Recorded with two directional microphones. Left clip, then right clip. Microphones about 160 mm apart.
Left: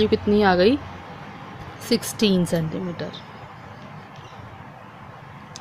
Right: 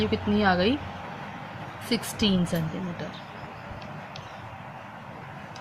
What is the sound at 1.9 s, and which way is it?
Speech, 65° left (ahead or behind).